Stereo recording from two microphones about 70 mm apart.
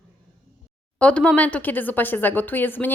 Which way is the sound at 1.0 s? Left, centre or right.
Centre.